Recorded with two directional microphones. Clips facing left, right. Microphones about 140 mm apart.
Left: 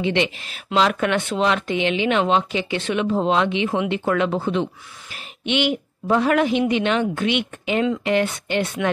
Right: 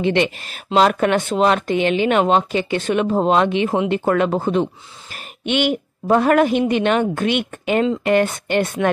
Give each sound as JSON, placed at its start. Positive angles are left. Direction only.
{"t": 0.0, "sound": "speech", "side_deg": -50}